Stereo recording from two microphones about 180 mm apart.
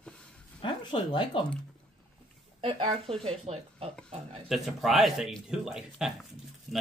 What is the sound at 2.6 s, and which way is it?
Speech, 30° right (ahead or behind).